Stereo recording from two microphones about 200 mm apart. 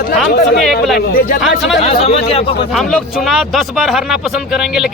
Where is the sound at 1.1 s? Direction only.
45° left (ahead or behind).